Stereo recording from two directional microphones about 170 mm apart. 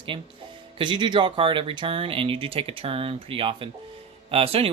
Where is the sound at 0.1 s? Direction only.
30° right (ahead or behind).